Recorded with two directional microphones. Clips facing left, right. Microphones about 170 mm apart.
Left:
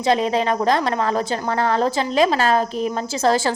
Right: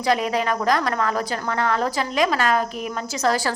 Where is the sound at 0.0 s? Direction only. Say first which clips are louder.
Left 3 dB; 25° left (ahead or behind).